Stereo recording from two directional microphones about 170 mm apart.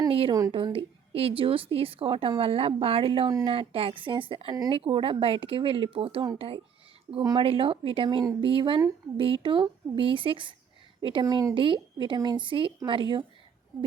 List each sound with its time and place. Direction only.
0.1 s a woman's voice: 35° right (ahead or behind)
7.2 s a woman's voice: 20° right (ahead or behind)
7.4 s a woman's voice: 35° right (ahead or behind)
13.7 s speech: centre (ahead or behind)